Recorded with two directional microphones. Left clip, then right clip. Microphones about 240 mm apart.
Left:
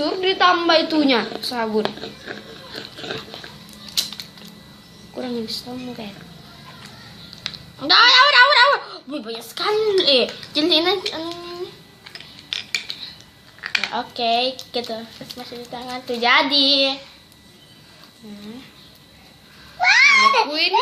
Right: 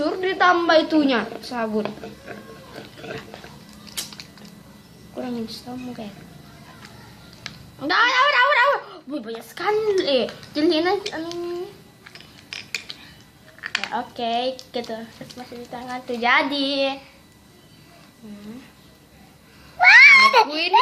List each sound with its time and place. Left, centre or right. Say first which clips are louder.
0.0 s a woman's voice: left 2 dB; centre
1.8 s speech: left 4 dB; left
5.1 s a woman's voice: left 3 dB; centre
7.4 s speech: left 5 dB; centre
13.6 s a child's voice: left 3 dB; centre
19.8 s cat: right 3 dB; right
20.5 s a woman's voice: left 4 dB; centre